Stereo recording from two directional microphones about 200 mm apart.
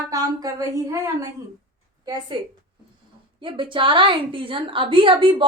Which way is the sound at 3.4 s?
25° right (ahead or behind).